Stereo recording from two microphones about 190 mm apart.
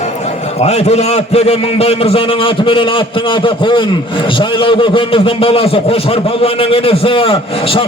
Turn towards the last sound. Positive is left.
turn(degrees=30)  # may be behind; listen again after turning